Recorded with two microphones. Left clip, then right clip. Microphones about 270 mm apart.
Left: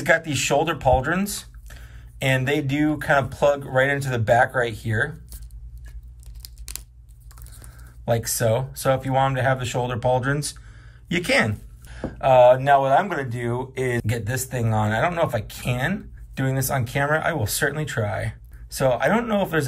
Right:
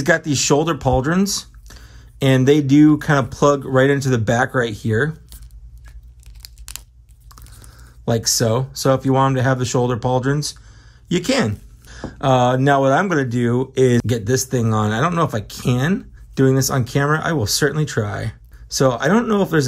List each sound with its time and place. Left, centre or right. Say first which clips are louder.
0.2 s speech: right 4 dB; centre
6.4 s tearing: right 3 dB; centre
8.1 s speech: right 3 dB; centre